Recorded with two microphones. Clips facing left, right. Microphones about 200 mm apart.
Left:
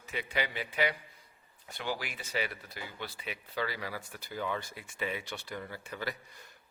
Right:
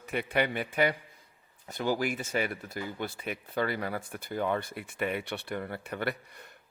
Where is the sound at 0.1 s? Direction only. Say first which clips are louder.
Right 6 dB; 55° right (ahead or behind).